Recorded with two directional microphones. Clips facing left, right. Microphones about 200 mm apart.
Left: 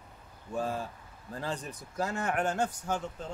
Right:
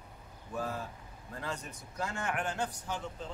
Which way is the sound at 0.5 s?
30° left (ahead or behind).